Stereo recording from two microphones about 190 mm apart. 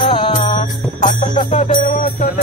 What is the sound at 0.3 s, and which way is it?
Music, 35° left (ahead or behind).